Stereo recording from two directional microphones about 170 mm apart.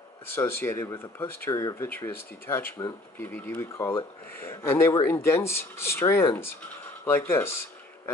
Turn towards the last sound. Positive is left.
turn(degrees=15)  # may be behind; listen again after turning